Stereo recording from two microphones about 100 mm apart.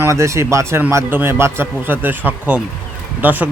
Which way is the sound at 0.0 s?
30° right (ahead or behind).